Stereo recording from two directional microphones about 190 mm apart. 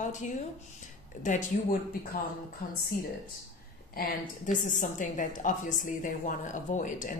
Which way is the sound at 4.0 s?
40° left (ahead or behind).